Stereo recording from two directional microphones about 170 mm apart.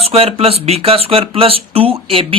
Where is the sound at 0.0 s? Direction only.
35° right (ahead or behind).